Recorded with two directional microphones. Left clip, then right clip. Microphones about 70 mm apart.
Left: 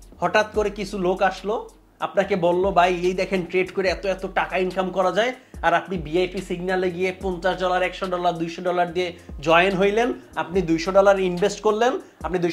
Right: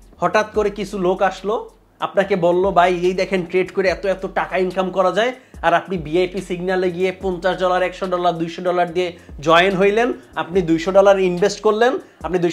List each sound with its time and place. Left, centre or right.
0.2 s speech: right